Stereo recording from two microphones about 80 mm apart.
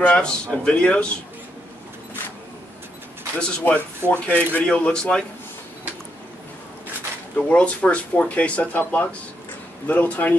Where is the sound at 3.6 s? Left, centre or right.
Left.